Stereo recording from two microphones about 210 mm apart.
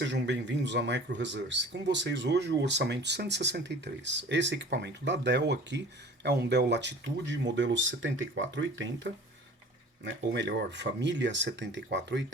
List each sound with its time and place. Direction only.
0.0 s speech: 55° right (ahead or behind)